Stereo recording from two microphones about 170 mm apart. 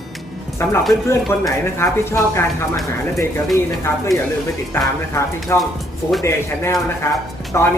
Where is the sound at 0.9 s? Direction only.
15° left (ahead or behind).